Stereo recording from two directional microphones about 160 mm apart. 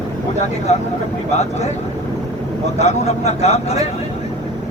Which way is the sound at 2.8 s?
45° left (ahead or behind).